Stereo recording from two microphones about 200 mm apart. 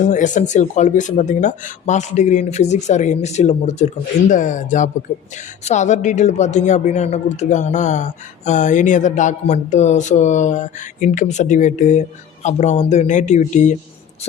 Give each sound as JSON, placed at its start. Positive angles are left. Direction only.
{"t": 0.0, "sound": "speech", "side_deg": 40}